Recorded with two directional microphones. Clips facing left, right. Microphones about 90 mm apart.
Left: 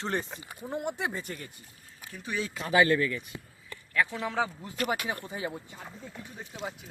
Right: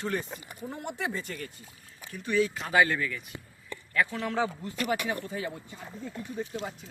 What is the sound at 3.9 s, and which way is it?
Speech, centre (ahead or behind).